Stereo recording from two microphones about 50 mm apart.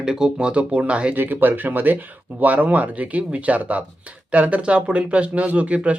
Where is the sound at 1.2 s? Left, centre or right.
Right.